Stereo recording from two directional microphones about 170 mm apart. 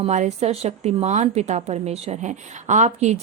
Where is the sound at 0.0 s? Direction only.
40° right (ahead or behind).